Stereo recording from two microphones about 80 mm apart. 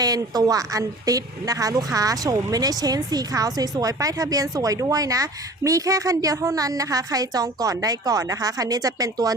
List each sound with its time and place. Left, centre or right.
0.0 s a woman's voice: right